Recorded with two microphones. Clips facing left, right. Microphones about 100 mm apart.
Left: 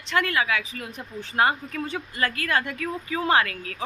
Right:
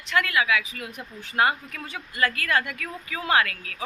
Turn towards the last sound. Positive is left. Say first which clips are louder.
# left 1 dB
turn(degrees=30)  # may be behind; listen again after turning